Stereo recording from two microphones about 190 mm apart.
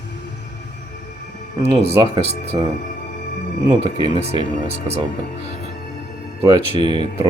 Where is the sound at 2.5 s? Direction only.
25° right (ahead or behind).